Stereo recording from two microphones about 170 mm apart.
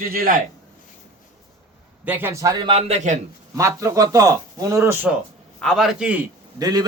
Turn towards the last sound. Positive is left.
turn(degrees=-20)  # may be behind; listen again after turning